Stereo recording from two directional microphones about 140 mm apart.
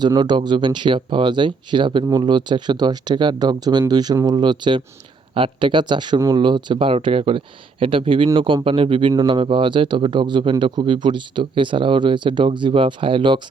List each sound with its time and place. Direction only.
0.0 s speech: 30° right (ahead or behind)